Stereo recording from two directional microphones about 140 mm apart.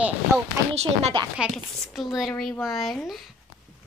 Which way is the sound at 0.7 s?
50° right (ahead or behind).